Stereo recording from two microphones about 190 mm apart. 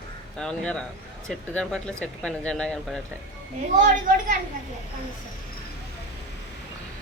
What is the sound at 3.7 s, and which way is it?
Speech, 40° right (ahead or behind).